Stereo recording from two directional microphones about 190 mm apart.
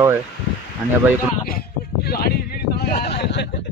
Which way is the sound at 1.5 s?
55° left (ahead or behind).